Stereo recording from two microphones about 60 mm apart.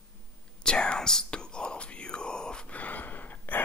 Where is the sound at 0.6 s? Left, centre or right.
Centre.